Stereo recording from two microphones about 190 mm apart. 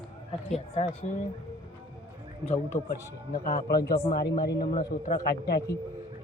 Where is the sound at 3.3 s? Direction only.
45° left (ahead or behind).